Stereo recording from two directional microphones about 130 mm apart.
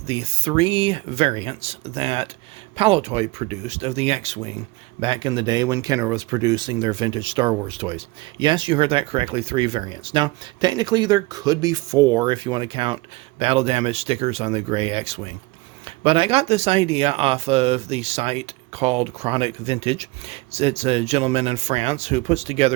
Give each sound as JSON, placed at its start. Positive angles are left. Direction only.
{"t": 0.0, "sound": "speech", "side_deg": -45}
{"t": 4.9, "sound": "speech", "side_deg": -40}